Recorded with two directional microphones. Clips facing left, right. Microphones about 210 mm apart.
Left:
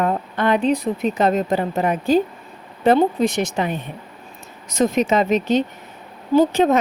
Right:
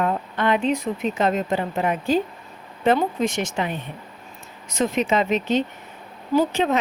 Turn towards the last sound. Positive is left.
turn(degrees=45)  # may be behind; listen again after turning